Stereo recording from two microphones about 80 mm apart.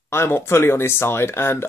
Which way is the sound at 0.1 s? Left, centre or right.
Left.